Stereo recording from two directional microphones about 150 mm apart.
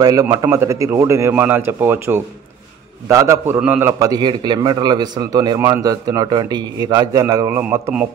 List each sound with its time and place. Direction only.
0.0 s a man's voice: 25° right (ahead or behind)
4.0 s a man's voice: 25° right (ahead or behind)